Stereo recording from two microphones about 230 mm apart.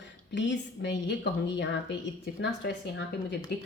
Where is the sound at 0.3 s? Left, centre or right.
Left.